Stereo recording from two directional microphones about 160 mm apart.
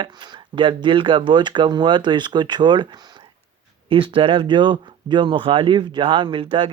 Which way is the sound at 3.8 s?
35° right (ahead or behind).